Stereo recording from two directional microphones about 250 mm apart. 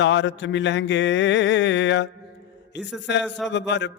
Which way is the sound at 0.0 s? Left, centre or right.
Left.